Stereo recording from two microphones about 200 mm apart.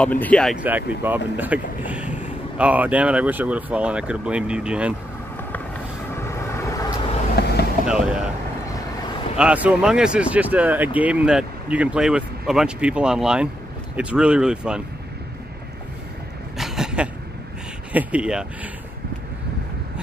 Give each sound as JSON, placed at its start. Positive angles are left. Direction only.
{"t": 0.0, "sound": "speech", "side_deg": 5}
{"t": 0.6, "sound": "speech", "side_deg": -10}
{"t": 6.1, "sound": "vehicle", "side_deg": 15}
{"t": 7.4, "sound": "vehicle", "side_deg": 55}
{"t": 7.8, "sound": "speech", "side_deg": -5}
{"t": 9.4, "sound": "speech", "side_deg": -5}
{"t": 16.5, "sound": "a sound", "side_deg": 0}
{"t": 17.9, "sound": "speech", "side_deg": -5}